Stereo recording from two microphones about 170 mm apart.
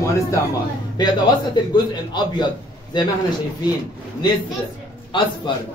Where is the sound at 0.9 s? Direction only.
25° left (ahead or behind).